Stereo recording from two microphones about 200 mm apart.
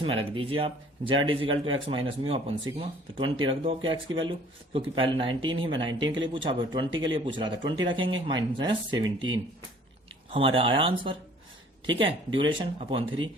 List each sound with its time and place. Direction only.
0.0 s speech: 25° right (ahead or behind)
10.3 s speech: 25° right (ahead or behind)